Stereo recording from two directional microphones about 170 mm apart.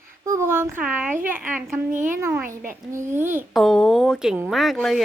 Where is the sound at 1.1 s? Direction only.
50° right (ahead or behind).